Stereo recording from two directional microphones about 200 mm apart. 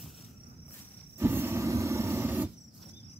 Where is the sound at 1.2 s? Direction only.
10° right (ahead or behind).